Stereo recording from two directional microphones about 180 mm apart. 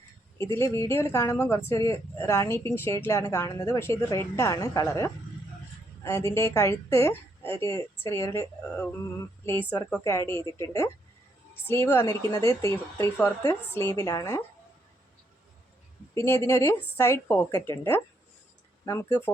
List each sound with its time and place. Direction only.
0.3 s a woman's voice: 15° left (ahead or behind)
16.1 s a woman's voice: 15° left (ahead or behind)